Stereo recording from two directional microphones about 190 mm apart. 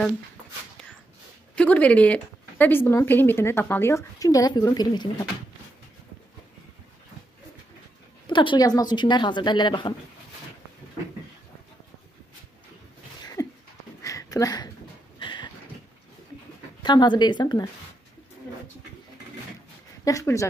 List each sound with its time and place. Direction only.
1.5 s speech: 5° left (ahead or behind)
8.3 s a woman's voice: 25° left (ahead or behind)
13.4 s a sound: 20° left (ahead or behind)
16.8 s a woman's voice: 25° left (ahead or behind)
20.1 s speech: 15° left (ahead or behind)